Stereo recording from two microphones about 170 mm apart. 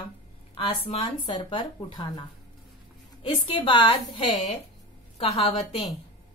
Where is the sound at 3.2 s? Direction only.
30° left (ahead or behind).